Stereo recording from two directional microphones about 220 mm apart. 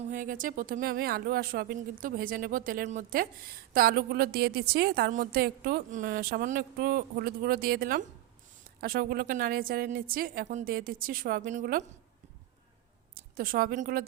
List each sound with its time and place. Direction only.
0.1 s speech: 35° right (ahead or behind)
13.1 s a woman's voice: 40° right (ahead or behind)